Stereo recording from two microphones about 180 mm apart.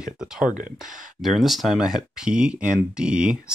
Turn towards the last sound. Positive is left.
turn(degrees=-5)  # may be behind; listen again after turning